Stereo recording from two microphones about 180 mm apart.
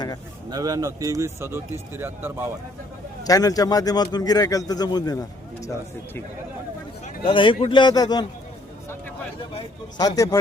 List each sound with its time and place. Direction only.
0.5 s speech: 20° right (ahead or behind)
3.2 s a man's voice: 20° left (ahead or behind)
7.3 s a man's voice: 30° left (ahead or behind)
9.6 s a man's voice: 20° left (ahead or behind)